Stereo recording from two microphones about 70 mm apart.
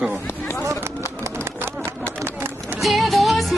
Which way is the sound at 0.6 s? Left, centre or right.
Right.